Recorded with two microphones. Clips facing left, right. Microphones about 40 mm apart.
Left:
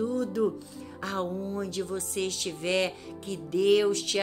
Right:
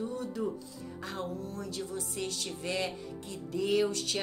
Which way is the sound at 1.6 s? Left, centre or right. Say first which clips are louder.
Left 5 dB; left.